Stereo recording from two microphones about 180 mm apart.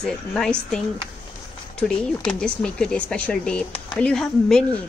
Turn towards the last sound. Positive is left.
turn(degrees=5)  # may be behind; listen again after turning